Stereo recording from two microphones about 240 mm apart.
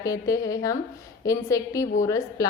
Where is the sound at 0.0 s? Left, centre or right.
Centre.